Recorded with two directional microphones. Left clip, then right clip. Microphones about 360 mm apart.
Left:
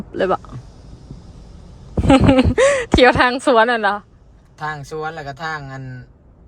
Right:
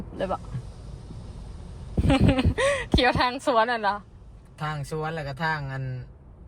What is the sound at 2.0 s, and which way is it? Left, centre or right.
Speech, left.